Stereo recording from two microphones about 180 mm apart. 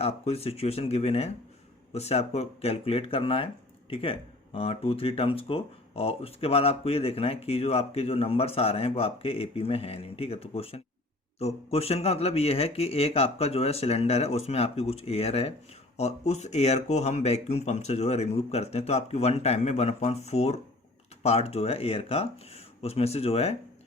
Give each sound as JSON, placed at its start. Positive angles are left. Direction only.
{"t": 0.0, "sound": "speech", "side_deg": 35}